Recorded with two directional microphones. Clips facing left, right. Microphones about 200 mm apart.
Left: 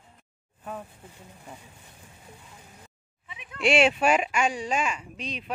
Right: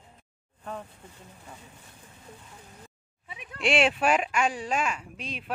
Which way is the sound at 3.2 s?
35° right (ahead or behind).